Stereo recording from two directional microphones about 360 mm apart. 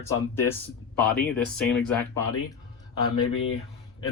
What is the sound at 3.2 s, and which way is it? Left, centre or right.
Speech, left.